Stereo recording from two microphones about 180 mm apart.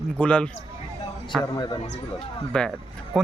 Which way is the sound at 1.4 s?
25° left (ahead or behind).